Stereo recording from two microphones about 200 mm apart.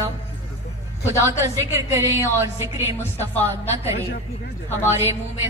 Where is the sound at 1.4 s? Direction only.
10° right (ahead or behind).